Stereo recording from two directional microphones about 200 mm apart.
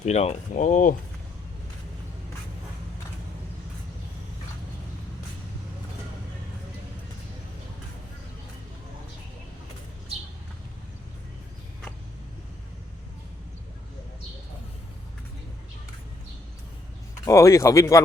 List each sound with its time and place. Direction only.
0.0 s speech: 35° left (ahead or behind)
17.2 s speech: 15° left (ahead or behind)